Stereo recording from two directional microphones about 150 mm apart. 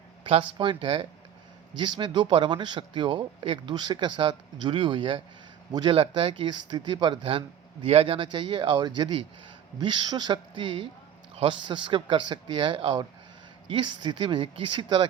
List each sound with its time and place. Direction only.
0.3 s speech: 35° right (ahead or behind)